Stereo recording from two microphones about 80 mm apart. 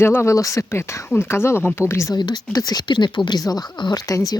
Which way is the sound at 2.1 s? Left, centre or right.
Left.